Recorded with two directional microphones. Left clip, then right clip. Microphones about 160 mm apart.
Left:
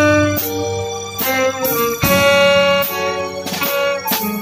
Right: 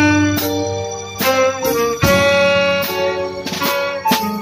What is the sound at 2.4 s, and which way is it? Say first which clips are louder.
Music: left 2 dB; 20° right (ahead or behind).